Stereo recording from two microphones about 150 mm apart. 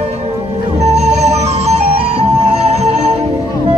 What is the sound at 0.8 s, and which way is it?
Music, 45° right (ahead or behind).